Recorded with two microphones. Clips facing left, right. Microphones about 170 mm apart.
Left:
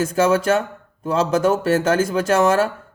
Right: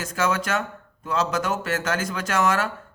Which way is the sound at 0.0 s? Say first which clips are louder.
Left 8 dB; 30° left (ahead or behind).